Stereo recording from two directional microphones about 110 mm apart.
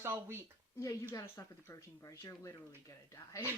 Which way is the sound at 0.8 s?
30° left (ahead or behind).